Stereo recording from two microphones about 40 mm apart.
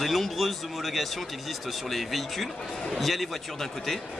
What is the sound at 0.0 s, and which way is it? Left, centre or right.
Speech, centre.